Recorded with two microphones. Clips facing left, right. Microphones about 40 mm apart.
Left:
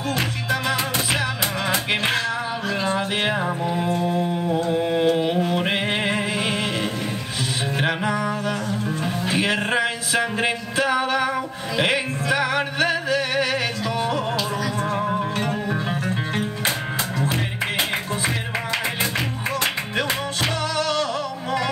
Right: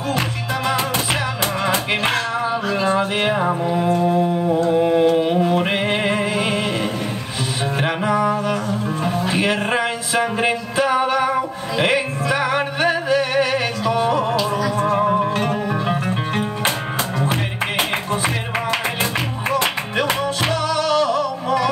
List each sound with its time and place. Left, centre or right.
2.9 s music: centre
3.6 s music: centre
5.5 s music: centre
6.3 s music: right
7.8 s music: centre
8.2 s music: right
9.2 s music: centre
9.7 s a sound: right
11.8 s music: right
15.1 s music: right
15.9 s music: centre
17.2 s music: right
20.4 s music: centre